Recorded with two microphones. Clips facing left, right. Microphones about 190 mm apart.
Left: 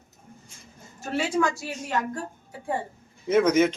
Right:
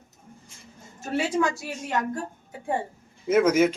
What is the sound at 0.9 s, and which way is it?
Speech, 20° right (ahead or behind).